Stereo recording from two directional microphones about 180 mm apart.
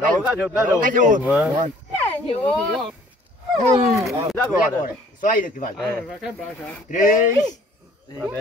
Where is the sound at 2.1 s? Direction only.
5° left (ahead or behind).